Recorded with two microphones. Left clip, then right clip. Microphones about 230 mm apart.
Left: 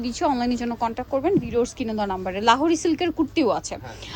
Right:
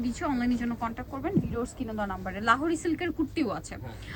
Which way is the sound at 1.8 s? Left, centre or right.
Right.